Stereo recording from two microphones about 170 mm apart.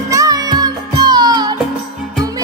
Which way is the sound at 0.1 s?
20° right (ahead or behind).